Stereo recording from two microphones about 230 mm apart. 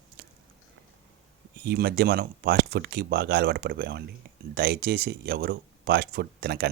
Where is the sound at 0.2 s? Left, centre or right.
Right.